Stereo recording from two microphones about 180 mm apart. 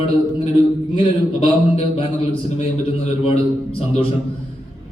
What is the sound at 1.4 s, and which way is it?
A man's voice, 30° left (ahead or behind).